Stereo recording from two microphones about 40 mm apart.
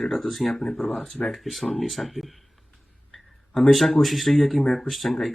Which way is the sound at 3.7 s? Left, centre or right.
Centre.